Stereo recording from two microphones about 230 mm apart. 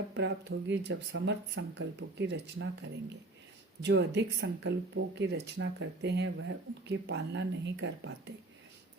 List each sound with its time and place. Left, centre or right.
0.1 s speech: right
3.8 s speech: right